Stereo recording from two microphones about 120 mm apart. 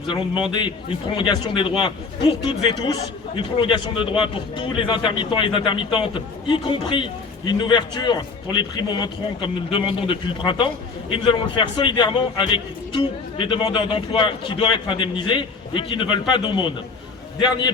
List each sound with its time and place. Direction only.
0.5 s a man's voice: 45° left (ahead or behind)